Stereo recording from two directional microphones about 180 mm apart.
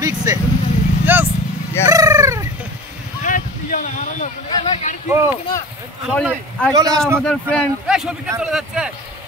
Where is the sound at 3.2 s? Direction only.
45° left (ahead or behind).